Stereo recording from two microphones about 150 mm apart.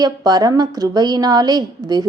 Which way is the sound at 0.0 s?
25° right (ahead or behind).